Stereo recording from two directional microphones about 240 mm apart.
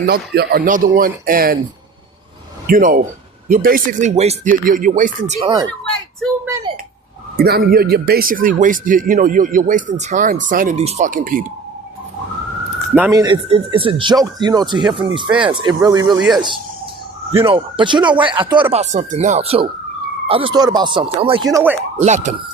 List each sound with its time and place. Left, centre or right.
0.0 s speech: right
2.6 s speech: right
5.3 s speech: centre
7.3 s speech: right
12.9 s speech: centre
17.4 s speech: right
22.0 s speech: right